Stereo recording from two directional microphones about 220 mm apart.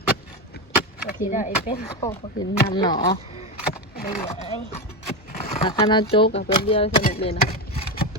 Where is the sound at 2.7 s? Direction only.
20° left (ahead or behind).